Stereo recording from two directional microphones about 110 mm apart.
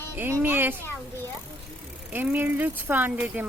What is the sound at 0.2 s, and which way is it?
Music, 20° right (ahead or behind).